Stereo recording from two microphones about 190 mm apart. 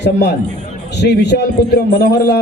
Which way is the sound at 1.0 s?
65° left (ahead or behind).